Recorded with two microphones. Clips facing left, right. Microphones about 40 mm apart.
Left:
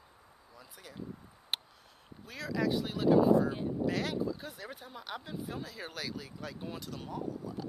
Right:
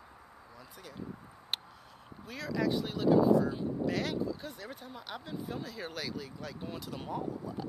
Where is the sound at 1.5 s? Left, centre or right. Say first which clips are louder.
Left 1 dB; centre.